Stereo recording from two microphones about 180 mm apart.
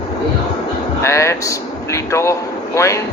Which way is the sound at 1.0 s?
15° left (ahead or behind).